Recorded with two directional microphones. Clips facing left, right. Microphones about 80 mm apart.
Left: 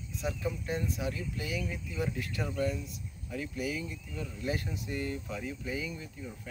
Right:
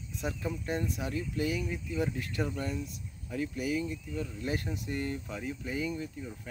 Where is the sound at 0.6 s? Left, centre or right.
Right.